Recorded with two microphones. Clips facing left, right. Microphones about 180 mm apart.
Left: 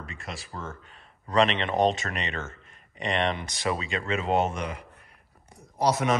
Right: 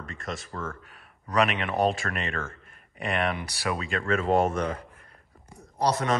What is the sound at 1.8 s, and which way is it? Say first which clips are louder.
A man's voice: left 1 dB; 5° right (ahead or behind).